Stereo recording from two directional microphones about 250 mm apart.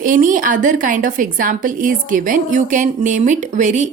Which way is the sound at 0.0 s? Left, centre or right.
Right.